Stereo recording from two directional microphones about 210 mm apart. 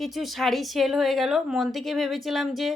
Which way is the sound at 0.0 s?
Centre (ahead or behind).